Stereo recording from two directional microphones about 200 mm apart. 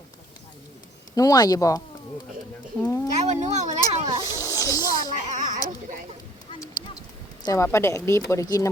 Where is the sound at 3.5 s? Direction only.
35° right (ahead or behind).